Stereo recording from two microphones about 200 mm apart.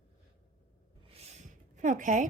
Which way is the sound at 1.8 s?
40° right (ahead or behind).